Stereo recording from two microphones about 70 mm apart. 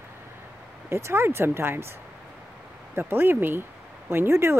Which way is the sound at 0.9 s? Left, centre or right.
Right.